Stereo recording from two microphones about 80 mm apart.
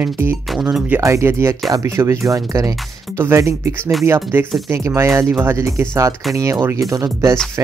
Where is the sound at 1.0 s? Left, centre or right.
Right.